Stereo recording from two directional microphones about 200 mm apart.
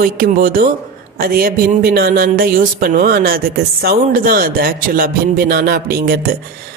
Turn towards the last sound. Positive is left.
turn(degrees=-50)  # may be behind; listen again after turning